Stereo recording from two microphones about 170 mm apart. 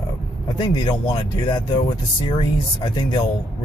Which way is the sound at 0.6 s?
25° left (ahead or behind).